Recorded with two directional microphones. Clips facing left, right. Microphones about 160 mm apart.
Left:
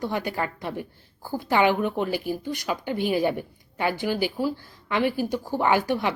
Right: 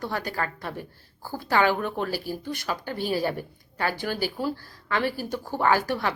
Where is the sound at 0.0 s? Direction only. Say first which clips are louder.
Left 2 dB; 20° left (ahead or behind).